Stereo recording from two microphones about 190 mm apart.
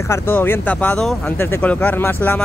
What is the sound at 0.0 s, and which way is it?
Speech, 15° left (ahead or behind).